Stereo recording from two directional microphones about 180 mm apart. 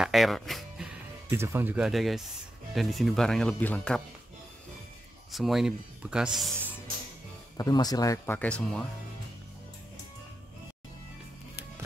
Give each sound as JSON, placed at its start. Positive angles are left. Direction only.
{"t": 0.0, "sound": "music", "side_deg": 0}
{"t": 1.3, "sound": "speech", "side_deg": -15}
{"t": 5.3, "sound": "speech", "side_deg": 0}
{"t": 7.5, "sound": "speech", "side_deg": 20}
{"t": 8.4, "sound": "speech", "side_deg": 5}